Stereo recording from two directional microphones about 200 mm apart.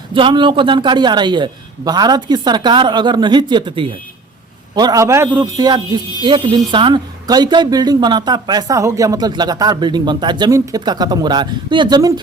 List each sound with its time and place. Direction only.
0.1 s a woman's voice: 25° right (ahead or behind)